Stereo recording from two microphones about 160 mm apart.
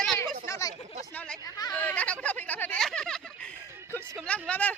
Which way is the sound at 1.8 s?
10° left (ahead or behind).